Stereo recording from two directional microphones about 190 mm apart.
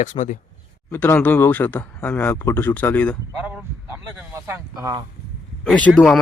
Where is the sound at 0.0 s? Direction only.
40° left (ahead or behind).